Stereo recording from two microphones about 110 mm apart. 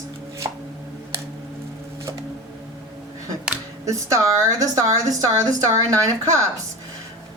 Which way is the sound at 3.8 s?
30° right (ahead or behind).